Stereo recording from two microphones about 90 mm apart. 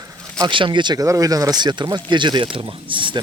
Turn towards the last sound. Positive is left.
turn(degrees=-65)  # may be behind; listen again after turning